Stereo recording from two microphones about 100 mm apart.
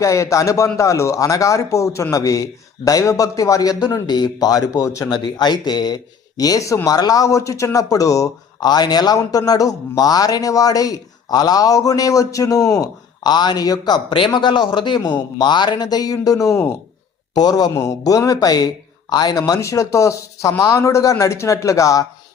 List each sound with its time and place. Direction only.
0.0 s speech: 30° left (ahead or behind)
17.3 s speech: 45° left (ahead or behind)